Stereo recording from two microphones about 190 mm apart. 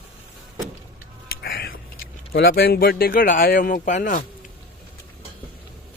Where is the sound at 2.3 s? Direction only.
60° left (ahead or behind); by 4.2 s 45° left (ahead or behind).